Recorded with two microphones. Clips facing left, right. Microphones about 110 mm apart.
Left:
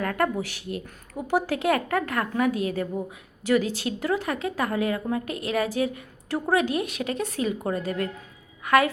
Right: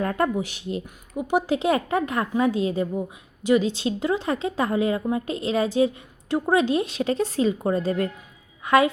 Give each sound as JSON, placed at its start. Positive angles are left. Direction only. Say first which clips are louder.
{"t": 0.0, "sound": "a woman's voice", "louder": "right 2 dB", "side_deg": -25}